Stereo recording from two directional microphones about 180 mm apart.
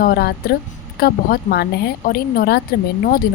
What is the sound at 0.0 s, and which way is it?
Speech, 60° left (ahead or behind).